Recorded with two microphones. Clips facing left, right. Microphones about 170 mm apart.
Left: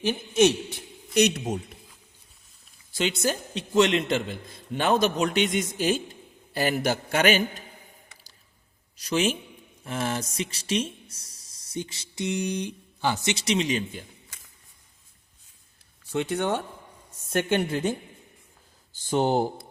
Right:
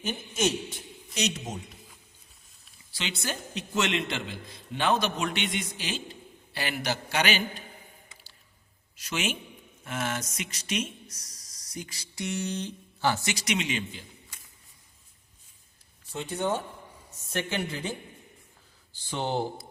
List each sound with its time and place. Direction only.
0.0 s a man's voice: 65° left (ahead or behind)
2.9 s a man's voice: 45° left (ahead or behind)
9.0 s a man's voice: 35° left (ahead or behind)
16.1 s speech: 70° left (ahead or behind)
17.3 s a man's voice: 50° left (ahead or behind)
19.0 s a man's voice: 45° left (ahead or behind)